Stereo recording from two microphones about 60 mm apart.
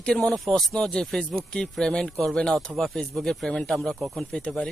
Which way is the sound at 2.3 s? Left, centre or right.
Centre.